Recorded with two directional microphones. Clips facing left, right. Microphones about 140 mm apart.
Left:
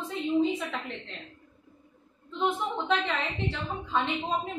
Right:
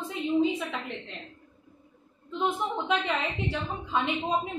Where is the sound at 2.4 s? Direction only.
10° right (ahead or behind).